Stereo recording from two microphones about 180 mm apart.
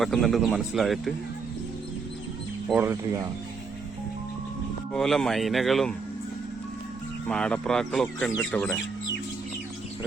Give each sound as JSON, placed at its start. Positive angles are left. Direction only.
{"t": 0.0, "sound": "speech", "side_deg": 0}
{"t": 2.7, "sound": "speech", "side_deg": -15}
{"t": 4.9, "sound": "speech", "side_deg": 0}
{"t": 7.3, "sound": "speech", "side_deg": 5}